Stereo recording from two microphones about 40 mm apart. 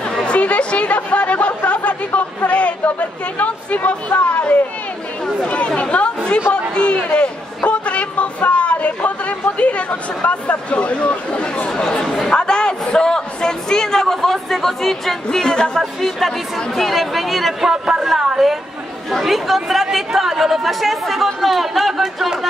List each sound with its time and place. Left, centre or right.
0.2 s chatter: left
5.8 s chatter: left
6.7 s a sound: left; by 15.1 s centre
15.3 s speech: centre
15.8 s speech: centre
17.6 s speech: centre